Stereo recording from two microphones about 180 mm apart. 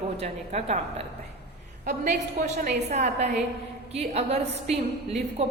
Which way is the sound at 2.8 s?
40° right (ahead or behind).